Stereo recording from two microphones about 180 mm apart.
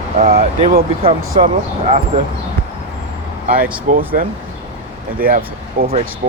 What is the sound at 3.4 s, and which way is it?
Speech, 50° right (ahead or behind).